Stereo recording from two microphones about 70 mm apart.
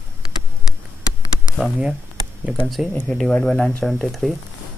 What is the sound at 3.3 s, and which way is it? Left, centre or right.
Speech, centre.